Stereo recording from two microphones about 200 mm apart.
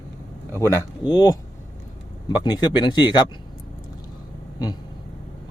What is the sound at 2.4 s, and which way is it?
Speech, 20° left (ahead or behind).